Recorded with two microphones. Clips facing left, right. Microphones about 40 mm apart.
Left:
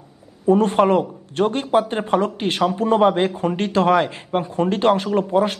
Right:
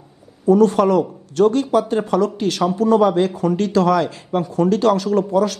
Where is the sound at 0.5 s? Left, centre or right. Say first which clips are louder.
Right 2 dB; left.